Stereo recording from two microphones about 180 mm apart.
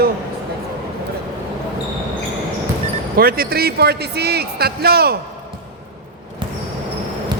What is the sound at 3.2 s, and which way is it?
A man's voice, 55° right (ahead or behind).